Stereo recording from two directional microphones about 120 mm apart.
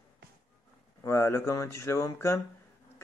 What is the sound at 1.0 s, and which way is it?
Speech, 20° left (ahead or behind).